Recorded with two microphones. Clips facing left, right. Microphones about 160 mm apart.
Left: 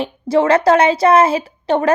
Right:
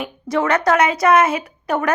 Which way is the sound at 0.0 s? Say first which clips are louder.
Left 5 dB; 30° left (ahead or behind).